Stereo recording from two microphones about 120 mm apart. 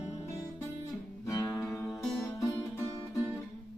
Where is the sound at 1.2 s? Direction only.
30° left (ahead or behind).